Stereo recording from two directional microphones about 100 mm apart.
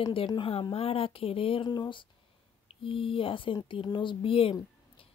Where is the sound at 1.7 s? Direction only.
50° left (ahead or behind).